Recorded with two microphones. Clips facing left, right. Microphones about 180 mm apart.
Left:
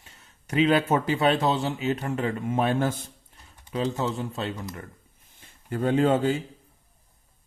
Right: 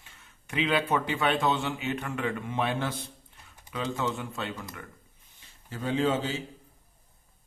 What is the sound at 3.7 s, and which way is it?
Speech, 35° left (ahead or behind).